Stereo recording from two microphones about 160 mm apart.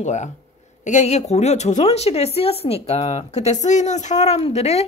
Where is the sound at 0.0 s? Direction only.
50° left (ahead or behind).